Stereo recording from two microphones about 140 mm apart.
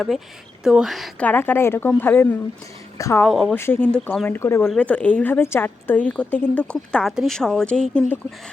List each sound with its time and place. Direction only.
0.6 s speech: 5° right (ahead or behind)
1.2 s a woman's voice: 15° left (ahead or behind)
3.2 s speech: centre (ahead or behind)
3.5 s a woman's voice: 15° left (ahead or behind)
4.7 s a woman's voice: 10° left (ahead or behind)